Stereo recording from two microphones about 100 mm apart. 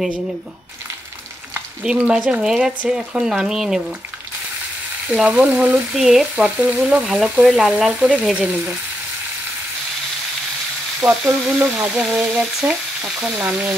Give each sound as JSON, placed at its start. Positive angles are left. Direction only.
{"t": 2.0, "sound": "speech", "side_deg": -15}
{"t": 5.1, "sound": "speech", "side_deg": -10}
{"t": 11.0, "sound": "speech", "side_deg": -20}
{"t": 12.6, "sound": "frying", "side_deg": -10}